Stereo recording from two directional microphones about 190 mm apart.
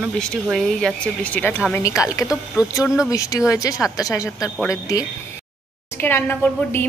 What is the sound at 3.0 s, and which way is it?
A woman's voice, 15° left (ahead or behind).